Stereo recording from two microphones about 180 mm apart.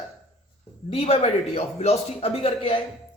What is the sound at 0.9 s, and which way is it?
A man's voice, 30° left (ahead or behind).